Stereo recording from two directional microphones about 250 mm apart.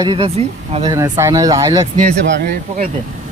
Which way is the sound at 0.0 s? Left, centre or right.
Centre.